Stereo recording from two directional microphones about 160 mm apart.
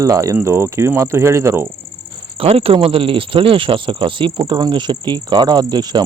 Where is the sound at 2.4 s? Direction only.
35° right (ahead or behind).